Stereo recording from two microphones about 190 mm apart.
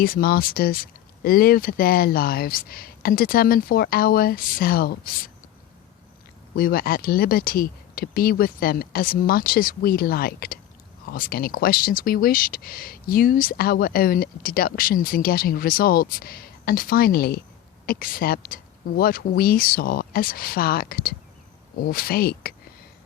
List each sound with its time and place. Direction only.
0.0 s speech: 50° left (ahead or behind)
6.6 s speech: 50° left (ahead or behind)